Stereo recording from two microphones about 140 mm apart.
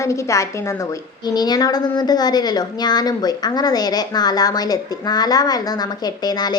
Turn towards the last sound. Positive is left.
turn(degrees=30)  # may be behind; listen again after turning